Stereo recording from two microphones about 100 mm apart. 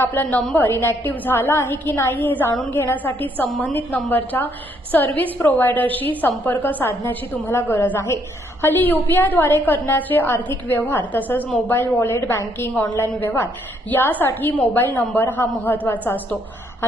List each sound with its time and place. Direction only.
0.1 s a woman's voice: 15° left (ahead or behind)